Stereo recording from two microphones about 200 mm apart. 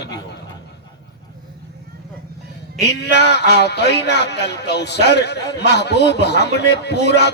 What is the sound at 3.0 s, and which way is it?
Music, 55° left (ahead or behind).